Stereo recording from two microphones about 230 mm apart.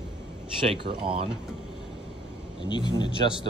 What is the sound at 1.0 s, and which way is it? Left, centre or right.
Speech, right.